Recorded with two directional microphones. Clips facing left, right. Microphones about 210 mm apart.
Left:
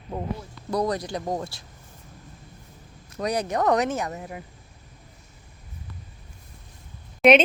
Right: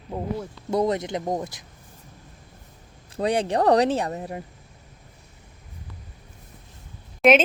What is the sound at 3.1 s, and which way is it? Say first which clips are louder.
Speech: right 3 dB; 30° right (ahead or behind).